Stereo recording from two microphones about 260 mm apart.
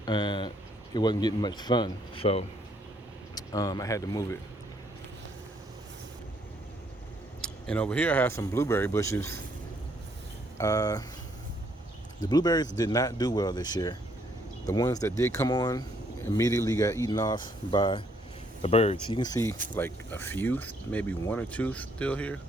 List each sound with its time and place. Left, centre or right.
0.0 s speech: centre
7.4 s speech: centre
10.6 s speech: centre
12.2 s speech: centre